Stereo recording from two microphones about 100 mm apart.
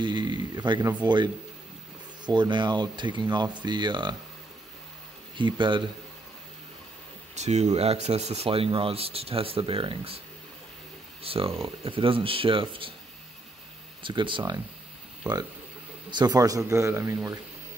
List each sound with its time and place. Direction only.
0.0 s speech: 50° right (ahead or behind)
5.4 s speech: 50° right (ahead or behind)
7.4 s speech: 90° right; by 10.2 s 65° right (ahead or behind)
11.2 s speech: 70° right (ahead or behind)
14.0 s speech: 55° right (ahead or behind)
15.2 s speech: 10° right (ahead or behind)
16.1 s speech: 45° right (ahead or behind); by 17.4 s 25° right (ahead or behind)